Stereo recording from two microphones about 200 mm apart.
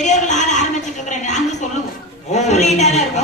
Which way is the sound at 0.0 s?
35° left (ahead or behind).